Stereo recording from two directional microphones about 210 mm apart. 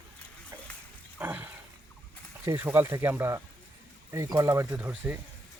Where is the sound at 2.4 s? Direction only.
10° right (ahead or behind).